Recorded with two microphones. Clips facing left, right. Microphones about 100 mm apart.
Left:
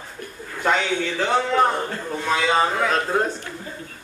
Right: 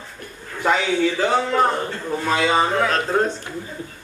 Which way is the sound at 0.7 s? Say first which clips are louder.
Right 3 dB; 5° right (ahead or behind).